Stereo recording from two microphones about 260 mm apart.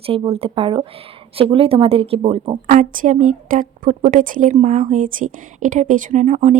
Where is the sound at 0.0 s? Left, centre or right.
Right.